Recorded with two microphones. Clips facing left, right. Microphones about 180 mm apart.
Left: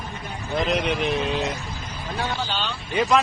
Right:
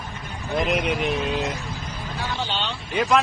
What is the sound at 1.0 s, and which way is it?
Speech, centre (ahead or behind).